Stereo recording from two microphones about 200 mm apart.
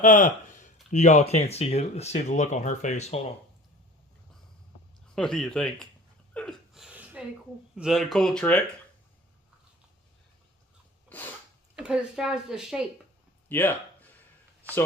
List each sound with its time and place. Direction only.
0.0 s speech: 40° left (ahead or behind)
5.1 s speech: 5° left (ahead or behind)
6.3 s gasp: centre (ahead or behind)
7.8 s speech: centre (ahead or behind)
11.8 s speech: 5° right (ahead or behind)
13.5 s speech: 10° left (ahead or behind)